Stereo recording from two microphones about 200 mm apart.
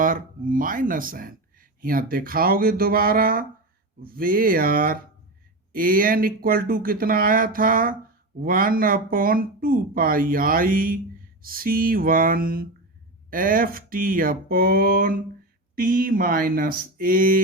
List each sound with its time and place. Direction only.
0.0 s speech: 45° right (ahead or behind)